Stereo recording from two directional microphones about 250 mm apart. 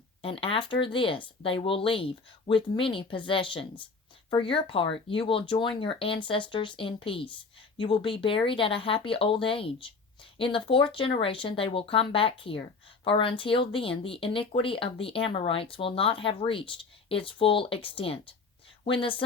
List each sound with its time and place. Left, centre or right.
0.2 s speech: left